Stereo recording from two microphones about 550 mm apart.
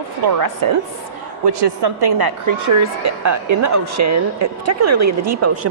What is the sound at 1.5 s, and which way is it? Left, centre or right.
A woman's voice, right.